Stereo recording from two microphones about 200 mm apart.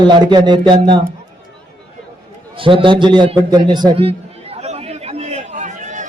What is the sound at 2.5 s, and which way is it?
Speech, 25° right (ahead or behind).